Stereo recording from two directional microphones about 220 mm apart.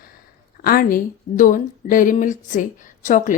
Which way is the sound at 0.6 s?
40° left (ahead or behind).